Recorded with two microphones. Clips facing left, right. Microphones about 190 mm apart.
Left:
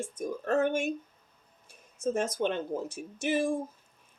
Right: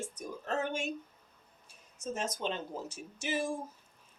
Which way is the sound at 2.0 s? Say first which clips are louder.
Left 7 dB; 55° left (ahead or behind).